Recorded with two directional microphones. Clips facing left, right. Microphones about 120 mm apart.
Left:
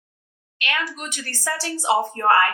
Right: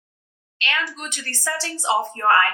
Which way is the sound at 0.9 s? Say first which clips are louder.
Left 1 dB; 20° left (ahead or behind).